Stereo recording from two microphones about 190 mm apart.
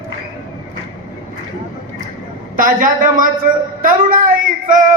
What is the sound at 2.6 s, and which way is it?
A woman's voice, 45° right (ahead or behind).